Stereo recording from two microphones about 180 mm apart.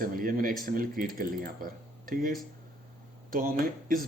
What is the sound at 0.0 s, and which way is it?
Speech, 50° right (ahead or behind).